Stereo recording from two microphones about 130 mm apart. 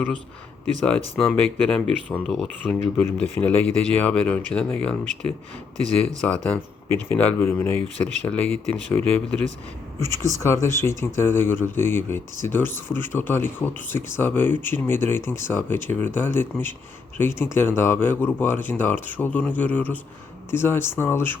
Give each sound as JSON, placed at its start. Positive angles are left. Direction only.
{"t": 0.9, "sound": "speech", "side_deg": 10}
{"t": 6.2, "sound": "speech", "side_deg": 10}
{"t": 8.0, "sound": "speech", "side_deg": 10}